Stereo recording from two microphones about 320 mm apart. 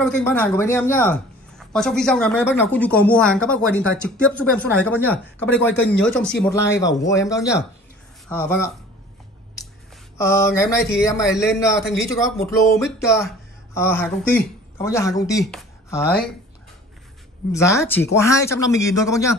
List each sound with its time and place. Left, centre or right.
0.0 s speech: centre
10.1 s speech: centre
11.1 s speech: centre
17.5 s speech: centre